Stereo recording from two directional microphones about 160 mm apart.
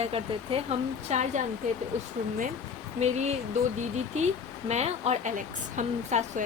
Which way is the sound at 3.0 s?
45° right (ahead or behind).